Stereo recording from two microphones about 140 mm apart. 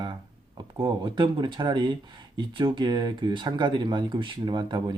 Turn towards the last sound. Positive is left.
turn(degrees=-30)  # may be behind; listen again after turning